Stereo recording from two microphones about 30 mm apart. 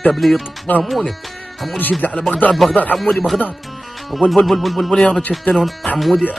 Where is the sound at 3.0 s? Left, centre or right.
Centre.